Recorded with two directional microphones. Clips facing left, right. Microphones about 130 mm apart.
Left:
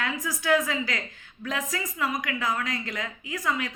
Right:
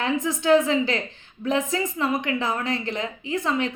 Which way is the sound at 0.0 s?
25° right (ahead or behind).